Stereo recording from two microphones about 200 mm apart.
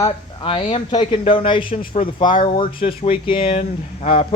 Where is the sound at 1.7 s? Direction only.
45° left (ahead or behind).